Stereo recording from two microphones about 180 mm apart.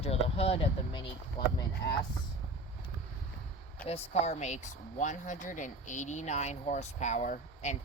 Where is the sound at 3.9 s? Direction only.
35° left (ahead or behind).